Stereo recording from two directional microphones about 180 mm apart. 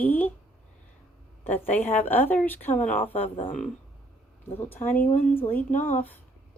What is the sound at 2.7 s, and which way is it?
Speech, 45° left (ahead or behind).